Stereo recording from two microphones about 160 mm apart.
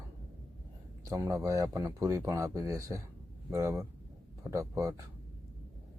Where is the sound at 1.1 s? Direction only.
20° right (ahead or behind).